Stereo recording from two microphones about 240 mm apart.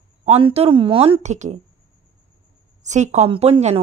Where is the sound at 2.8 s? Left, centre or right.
Right.